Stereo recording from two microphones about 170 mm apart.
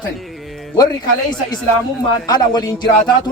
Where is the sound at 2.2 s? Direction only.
25° left (ahead or behind).